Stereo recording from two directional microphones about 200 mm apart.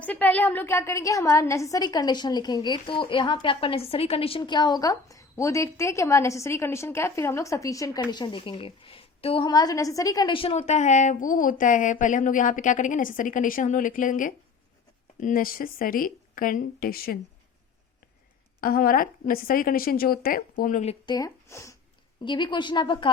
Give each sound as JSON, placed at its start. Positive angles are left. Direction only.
{"t": 0.0, "sound": "a woman's voice", "side_deg": 10}
{"t": 18.6, "sound": "a woman's voice", "side_deg": 45}
{"t": 21.1, "sound": "a woman's voice", "side_deg": 15}